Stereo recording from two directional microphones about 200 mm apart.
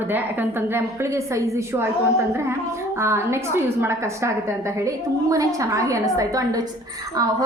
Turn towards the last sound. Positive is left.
turn(degrees=-20)  # may be behind; listen again after turning